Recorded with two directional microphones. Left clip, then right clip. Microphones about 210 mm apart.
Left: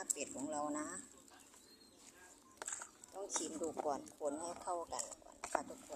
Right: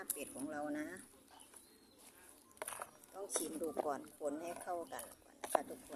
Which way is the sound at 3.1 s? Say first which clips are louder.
Even; 10° right (ahead or behind).